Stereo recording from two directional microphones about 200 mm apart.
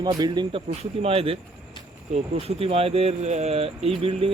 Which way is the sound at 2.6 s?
30° right (ahead or behind).